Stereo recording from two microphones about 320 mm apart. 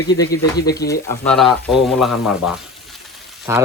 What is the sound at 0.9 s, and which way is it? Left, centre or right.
Speech, centre.